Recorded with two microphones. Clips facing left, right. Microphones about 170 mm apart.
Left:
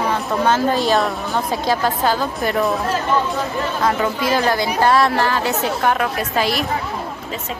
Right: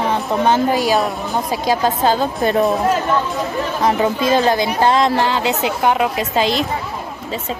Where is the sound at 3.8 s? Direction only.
20° right (ahead or behind).